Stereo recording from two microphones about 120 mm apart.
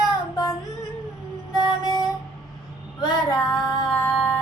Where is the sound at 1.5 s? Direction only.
35° left (ahead or behind).